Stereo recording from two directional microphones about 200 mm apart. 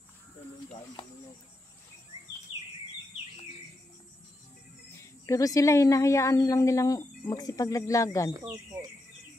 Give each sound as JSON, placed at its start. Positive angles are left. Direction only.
{"t": 5.2, "sound": "speech", "side_deg": 15}
{"t": 8.3, "sound": "speech", "side_deg": -15}